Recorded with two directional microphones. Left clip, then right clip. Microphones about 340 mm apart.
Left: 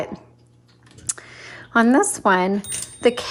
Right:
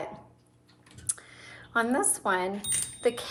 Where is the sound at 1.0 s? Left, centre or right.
Left.